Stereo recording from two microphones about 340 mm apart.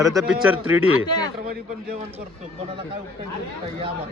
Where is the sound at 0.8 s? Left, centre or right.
Centre.